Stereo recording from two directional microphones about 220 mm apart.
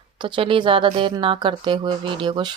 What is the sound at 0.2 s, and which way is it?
Speech, 20° right (ahead or behind).